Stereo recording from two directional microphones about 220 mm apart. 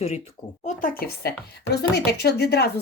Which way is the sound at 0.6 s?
40° left (ahead or behind).